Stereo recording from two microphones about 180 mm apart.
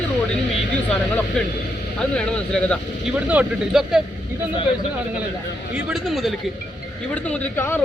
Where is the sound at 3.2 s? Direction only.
5° right (ahead or behind).